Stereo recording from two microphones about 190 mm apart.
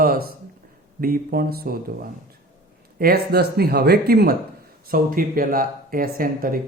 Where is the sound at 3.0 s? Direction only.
55° right (ahead or behind).